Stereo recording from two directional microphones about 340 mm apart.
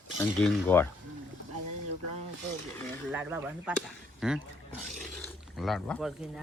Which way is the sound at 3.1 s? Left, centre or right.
Centre.